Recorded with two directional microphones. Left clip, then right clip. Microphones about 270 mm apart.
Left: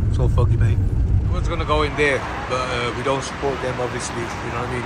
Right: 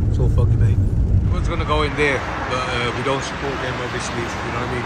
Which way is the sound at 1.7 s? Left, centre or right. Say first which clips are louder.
Even; centre.